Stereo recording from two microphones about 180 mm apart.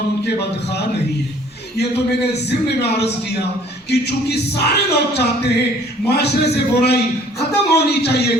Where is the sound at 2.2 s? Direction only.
70° left (ahead or behind).